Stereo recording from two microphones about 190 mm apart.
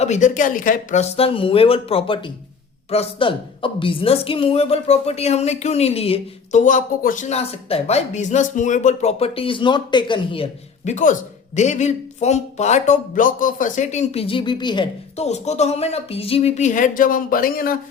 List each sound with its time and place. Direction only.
0.0 s a woman's voice: 40° left (ahead or behind)